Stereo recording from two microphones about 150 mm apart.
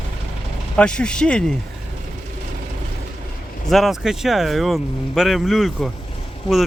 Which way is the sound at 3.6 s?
Centre (ahead or behind).